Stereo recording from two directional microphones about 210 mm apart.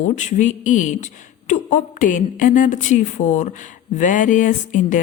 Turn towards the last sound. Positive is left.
turn(degrees=35)  # may be behind; listen again after turning